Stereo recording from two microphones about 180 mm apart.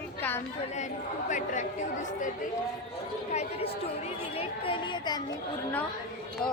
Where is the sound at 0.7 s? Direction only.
40° left (ahead or behind); by 5.2 s 25° left (ahead or behind).